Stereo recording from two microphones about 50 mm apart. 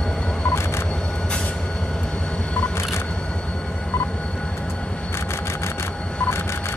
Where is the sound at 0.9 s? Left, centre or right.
Centre.